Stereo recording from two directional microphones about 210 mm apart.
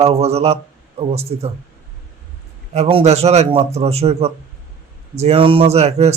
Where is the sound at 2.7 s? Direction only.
30° right (ahead or behind).